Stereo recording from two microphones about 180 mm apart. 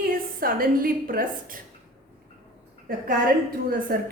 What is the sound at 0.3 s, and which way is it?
Speech, 55° right (ahead or behind).